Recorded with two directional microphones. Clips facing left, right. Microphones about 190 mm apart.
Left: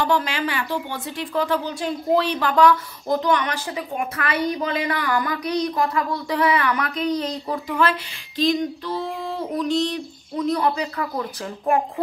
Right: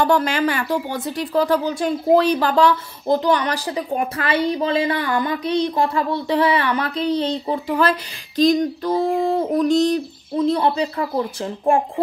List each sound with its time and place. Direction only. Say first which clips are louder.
0.0 s speech: right 5 dB; 45° right (ahead or behind); by 7.6 s 25° right (ahead or behind)
8.4 s speech: right 5 dB; 45° right (ahead or behind)
10.3 s speech: right 3 dB; 30° right (ahead or behind)